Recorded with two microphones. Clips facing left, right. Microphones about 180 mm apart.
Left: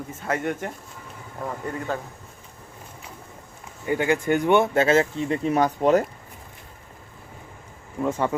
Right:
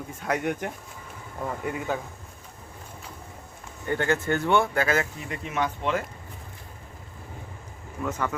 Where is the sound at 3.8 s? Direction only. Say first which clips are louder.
Left 3 dB; 10° left (ahead or behind); by 6.0 s 40° left (ahead or behind).